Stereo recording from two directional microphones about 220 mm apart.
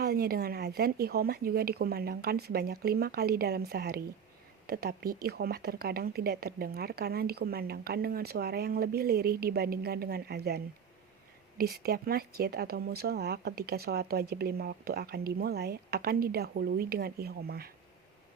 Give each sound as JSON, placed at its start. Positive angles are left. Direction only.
{"t": 0.0, "sound": "speech", "side_deg": -45}